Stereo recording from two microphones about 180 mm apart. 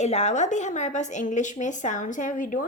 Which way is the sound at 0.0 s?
40° left (ahead or behind).